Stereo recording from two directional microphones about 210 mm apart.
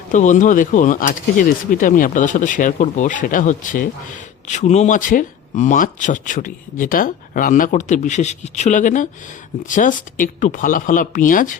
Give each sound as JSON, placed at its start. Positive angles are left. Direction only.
{"t": 0.1, "sound": "speech", "side_deg": 35}